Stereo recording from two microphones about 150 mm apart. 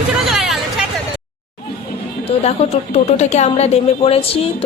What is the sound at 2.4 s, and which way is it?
A woman's voice, 45° left (ahead or behind).